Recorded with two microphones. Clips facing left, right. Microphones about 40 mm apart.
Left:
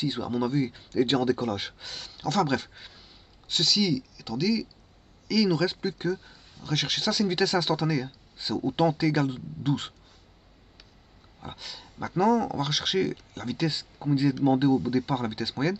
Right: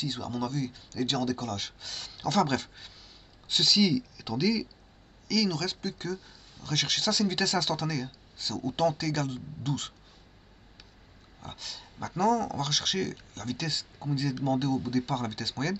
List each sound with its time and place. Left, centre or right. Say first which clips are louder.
0.0 s speech: left 5 dB; centre
2.0 s speech: even; centre
3.4 s speech: even; centre
5.3 s speech: left 5 dB; centre
11.3 s a sound: left 2 dB; centre
11.8 s speech: left 3 dB; centre